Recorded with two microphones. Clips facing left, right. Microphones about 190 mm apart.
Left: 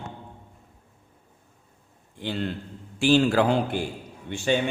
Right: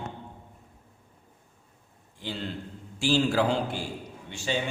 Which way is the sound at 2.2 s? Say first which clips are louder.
Left 5 dB; 60° left (ahead or behind).